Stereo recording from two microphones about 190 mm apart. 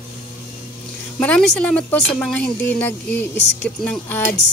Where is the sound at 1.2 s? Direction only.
5° left (ahead or behind).